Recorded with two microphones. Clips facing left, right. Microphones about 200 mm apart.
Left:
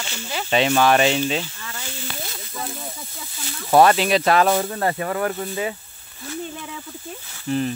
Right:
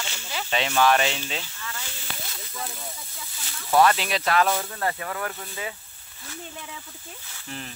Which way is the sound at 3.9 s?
25° left (ahead or behind).